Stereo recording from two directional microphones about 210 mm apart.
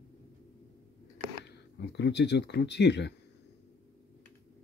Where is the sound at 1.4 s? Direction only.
55° left (ahead or behind).